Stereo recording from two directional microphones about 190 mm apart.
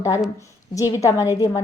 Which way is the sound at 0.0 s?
15° left (ahead or behind).